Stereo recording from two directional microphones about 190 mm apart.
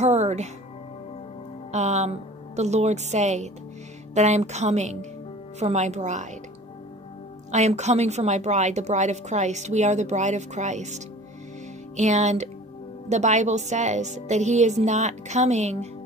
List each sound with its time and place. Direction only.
0.0 s music: 35° right (ahead or behind)
1.7 s a woman's voice: 35° right (ahead or behind)
7.5 s a woman's voice: 35° right (ahead or behind)
12.0 s a woman's voice: 40° right (ahead or behind)